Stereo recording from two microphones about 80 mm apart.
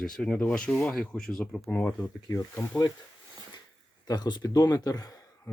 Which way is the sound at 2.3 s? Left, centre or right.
Left.